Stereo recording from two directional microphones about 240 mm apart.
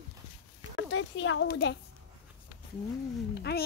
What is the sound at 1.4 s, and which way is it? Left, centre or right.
Speech, left.